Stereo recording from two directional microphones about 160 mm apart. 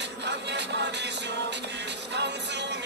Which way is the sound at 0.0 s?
90° right.